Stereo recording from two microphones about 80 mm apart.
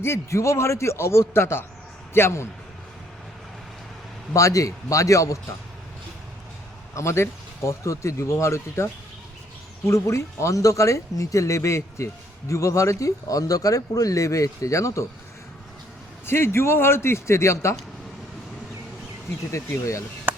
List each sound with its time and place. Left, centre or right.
0.0 s speech: left
4.4 s speech: left
6.9 s speech: left
16.2 s speech: left
19.5 s speech: left